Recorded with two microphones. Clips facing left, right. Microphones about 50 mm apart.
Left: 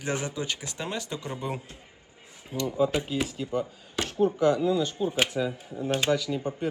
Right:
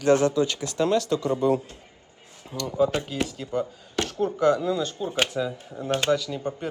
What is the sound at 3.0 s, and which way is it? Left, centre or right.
Speech, centre.